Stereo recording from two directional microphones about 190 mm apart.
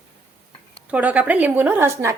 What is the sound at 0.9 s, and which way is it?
Speech, 5° right (ahead or behind).